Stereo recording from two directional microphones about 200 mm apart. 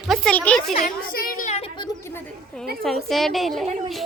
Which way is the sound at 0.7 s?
40° left (ahead or behind).